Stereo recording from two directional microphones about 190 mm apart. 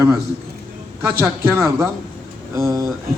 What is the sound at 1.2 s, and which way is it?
A man's voice, 15° right (ahead or behind).